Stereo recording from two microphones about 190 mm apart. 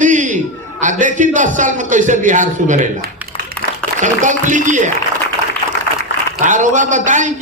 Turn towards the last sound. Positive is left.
turn(degrees=-40)  # may be behind; listen again after turning